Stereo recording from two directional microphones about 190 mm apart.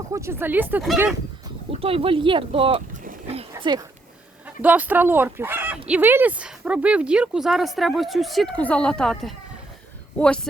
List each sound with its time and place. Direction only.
0.1 s speech: 15° right (ahead or behind)
1.7 s speech: 30° right (ahead or behind)
4.4 s speech: 10° right (ahead or behind)